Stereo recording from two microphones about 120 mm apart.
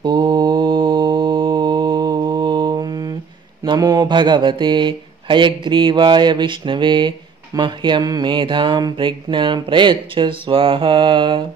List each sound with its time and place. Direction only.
0.0 s mantra: 35° right (ahead or behind)
3.6 s speech: 35° right (ahead or behind)